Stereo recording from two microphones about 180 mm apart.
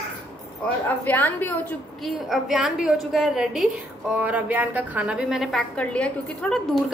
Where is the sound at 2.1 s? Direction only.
Centre (ahead or behind).